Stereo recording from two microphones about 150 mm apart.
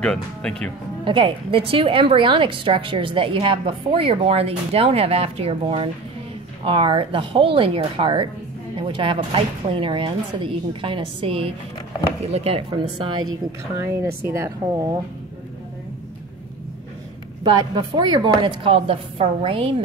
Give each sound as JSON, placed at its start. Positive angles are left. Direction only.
{"t": 0.0, "sound": "speech", "side_deg": 5}
{"t": 1.0, "sound": "a woman's voice", "side_deg": -35}
{"t": 13.7, "sound": "speech", "side_deg": -20}
{"t": 17.4, "sound": "a woman's voice", "side_deg": -30}